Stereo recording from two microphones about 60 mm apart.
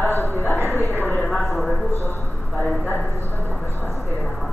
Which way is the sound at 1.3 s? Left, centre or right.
Centre.